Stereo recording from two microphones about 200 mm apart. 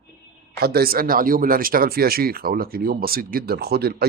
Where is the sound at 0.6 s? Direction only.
50° right (ahead or behind).